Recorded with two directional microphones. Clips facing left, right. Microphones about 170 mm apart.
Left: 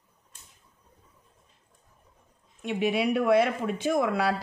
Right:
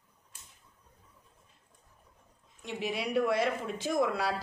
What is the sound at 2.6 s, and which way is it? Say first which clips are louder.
Speech: left 8 dB; 65° left (ahead or behind).